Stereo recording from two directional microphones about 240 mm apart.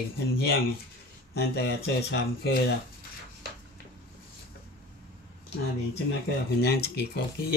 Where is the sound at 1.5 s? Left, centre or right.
Left.